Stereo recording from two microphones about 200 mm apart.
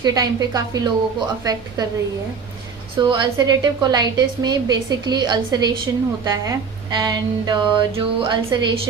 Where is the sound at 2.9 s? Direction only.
20° right (ahead or behind).